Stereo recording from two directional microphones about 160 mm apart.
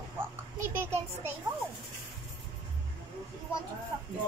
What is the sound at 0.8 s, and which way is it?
Speech, 15° right (ahead or behind).